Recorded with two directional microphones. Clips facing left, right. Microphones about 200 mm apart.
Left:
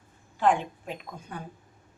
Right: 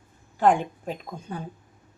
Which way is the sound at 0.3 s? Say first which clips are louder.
Right 4 dB; 45° right (ahead or behind).